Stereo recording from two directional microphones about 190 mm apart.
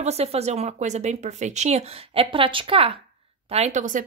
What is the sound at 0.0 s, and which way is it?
Speech, 35° right (ahead or behind).